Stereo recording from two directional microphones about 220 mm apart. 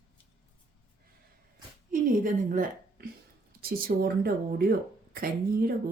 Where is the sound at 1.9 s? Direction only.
40° right (ahead or behind).